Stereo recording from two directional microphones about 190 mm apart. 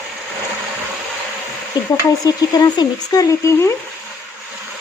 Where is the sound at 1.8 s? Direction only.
20° left (ahead or behind).